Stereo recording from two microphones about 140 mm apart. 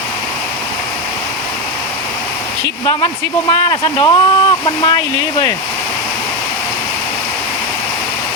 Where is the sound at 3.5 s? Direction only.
35° left (ahead or behind).